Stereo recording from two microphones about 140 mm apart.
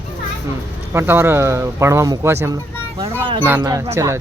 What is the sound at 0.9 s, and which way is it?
Speech, 15° right (ahead or behind).